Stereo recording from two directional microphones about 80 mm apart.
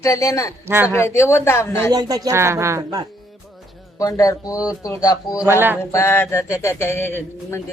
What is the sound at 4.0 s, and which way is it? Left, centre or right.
Speech, left.